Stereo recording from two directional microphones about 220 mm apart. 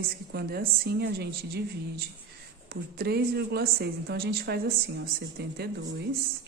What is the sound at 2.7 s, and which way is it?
A woman's voice, 45° right (ahead or behind).